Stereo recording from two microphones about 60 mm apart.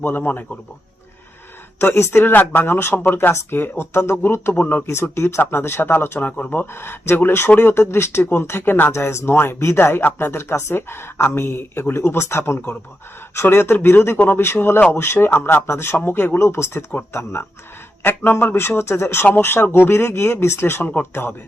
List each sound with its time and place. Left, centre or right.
0.2 s speech: left
1.8 s speech: left
2.3 s speech: left
6.1 s speech: left
6.7 s speech: left
8.9 s speech: left
10.0 s speech: left
18.0 s speech: left
18.5 s speech: left